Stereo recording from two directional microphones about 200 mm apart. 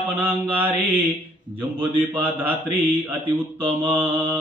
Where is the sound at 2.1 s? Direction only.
10° right (ahead or behind).